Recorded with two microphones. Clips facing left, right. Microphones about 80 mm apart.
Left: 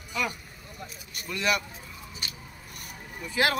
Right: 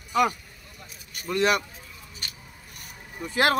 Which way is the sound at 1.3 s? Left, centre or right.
Right.